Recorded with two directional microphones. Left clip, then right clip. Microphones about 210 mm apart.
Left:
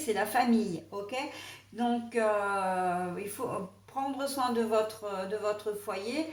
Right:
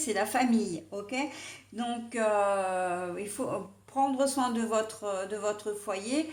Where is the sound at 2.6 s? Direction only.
45° right (ahead or behind).